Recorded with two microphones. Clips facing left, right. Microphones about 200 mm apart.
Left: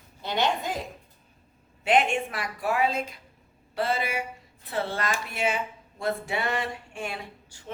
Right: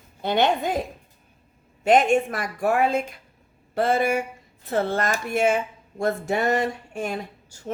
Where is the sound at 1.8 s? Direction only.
45° right (ahead or behind).